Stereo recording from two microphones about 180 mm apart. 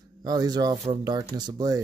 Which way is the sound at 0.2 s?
20° right (ahead or behind).